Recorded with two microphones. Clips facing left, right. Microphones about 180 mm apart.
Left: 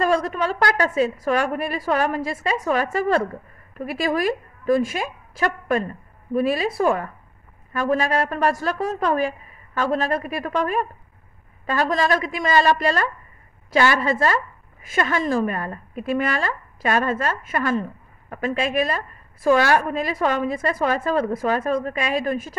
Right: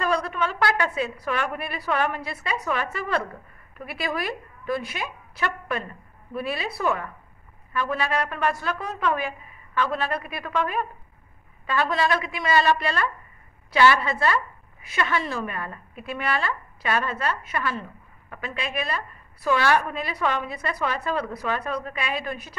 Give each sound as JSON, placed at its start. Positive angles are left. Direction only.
{"t": 0.0, "sound": "a woman's voice", "side_deg": 40}